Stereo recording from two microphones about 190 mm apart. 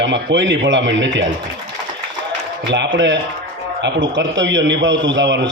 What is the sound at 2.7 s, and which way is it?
A man's voice, 70° right (ahead or behind).